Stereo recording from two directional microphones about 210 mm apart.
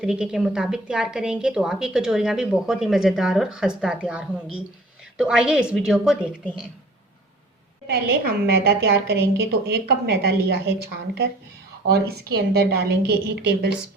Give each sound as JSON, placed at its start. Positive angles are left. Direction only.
{"t": 0.0, "sound": "a woman's voice", "side_deg": -5}
{"t": 7.9, "sound": "a woman's voice", "side_deg": -50}
{"t": 11.9, "sound": "a woman's voice", "side_deg": -50}